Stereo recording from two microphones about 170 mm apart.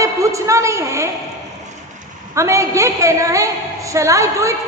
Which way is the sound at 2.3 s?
15° right (ahead or behind).